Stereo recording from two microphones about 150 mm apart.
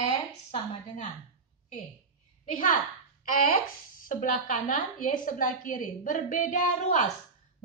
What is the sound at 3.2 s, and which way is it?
A woman's voice, 65° left (ahead or behind).